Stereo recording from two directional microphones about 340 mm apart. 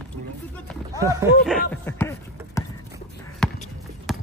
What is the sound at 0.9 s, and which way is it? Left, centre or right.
Speech, centre.